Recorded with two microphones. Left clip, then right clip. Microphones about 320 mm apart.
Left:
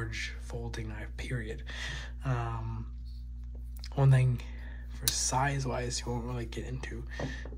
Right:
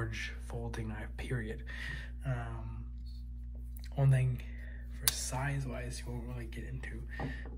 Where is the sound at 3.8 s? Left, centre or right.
Centre.